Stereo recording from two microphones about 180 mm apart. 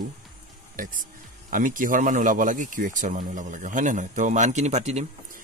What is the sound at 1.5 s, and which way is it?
Speech, 50° right (ahead or behind).